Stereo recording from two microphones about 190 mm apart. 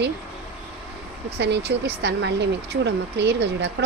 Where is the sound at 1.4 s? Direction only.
65° right (ahead or behind).